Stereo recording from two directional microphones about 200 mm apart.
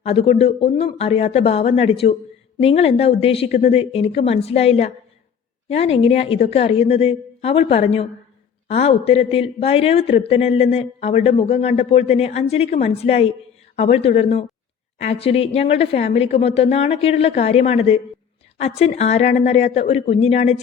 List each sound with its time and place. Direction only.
0.0 s a woman's voice: 30° left (ahead or behind)